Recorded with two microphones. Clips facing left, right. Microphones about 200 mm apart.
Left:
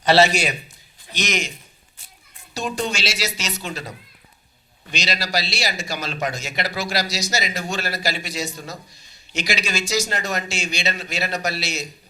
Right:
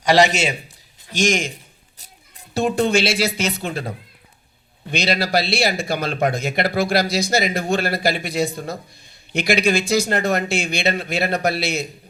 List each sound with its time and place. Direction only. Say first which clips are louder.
0.0 s a man's voice: right 1 dB; 15° right (ahead or behind)
1.1 s a man's voice: right 6 dB; 45° right (ahead or behind)